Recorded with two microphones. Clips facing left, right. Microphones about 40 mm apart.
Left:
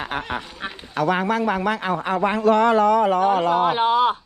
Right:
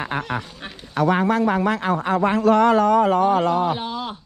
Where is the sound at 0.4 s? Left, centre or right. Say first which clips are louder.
Left 4 dB; centre.